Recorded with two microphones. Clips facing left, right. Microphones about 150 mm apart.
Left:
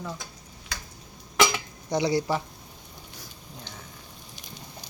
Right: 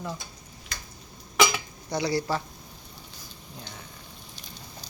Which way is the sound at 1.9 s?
20° left (ahead or behind).